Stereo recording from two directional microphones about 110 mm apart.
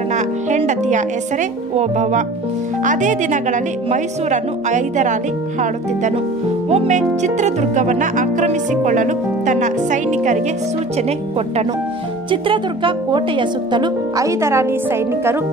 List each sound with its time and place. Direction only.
0.1 s music: 90° right
1.8 s speech: 90° right
3.2 s speech: 90° right
6.7 s speech: 80° right
10.0 s speech: 90° right
11.0 s speech: 70° right (ahead or behind)
12.3 s speech: 50° right (ahead or behind)
14.1 s a woman's voice: 30° right (ahead or behind)